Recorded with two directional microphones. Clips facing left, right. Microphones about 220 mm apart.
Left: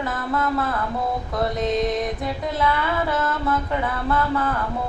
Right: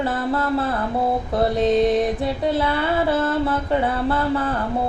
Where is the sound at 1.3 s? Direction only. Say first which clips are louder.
Right 5 dB; 30° right (ahead or behind).